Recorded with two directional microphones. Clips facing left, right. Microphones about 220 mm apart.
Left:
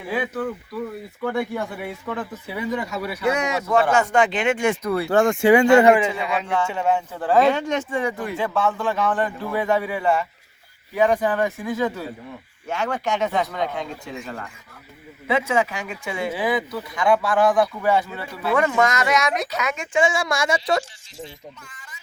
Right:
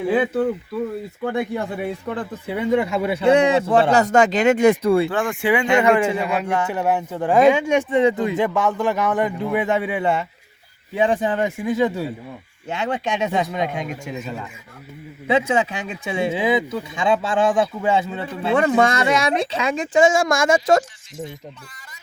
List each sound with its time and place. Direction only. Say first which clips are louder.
0.1 s speech: right 5 dB; 25° right (ahead or behind)
3.9 s speech: right 3 dB; 40° right (ahead or behind)
5.1 s speech: left 5 dB; 45° left (ahead or behind)
6.1 s speech: right 2 dB; 10° right (ahead or behind)
15.4 s speech: right 1 dB; 20° right (ahead or behind); by 20.8 s 45° right (ahead or behind)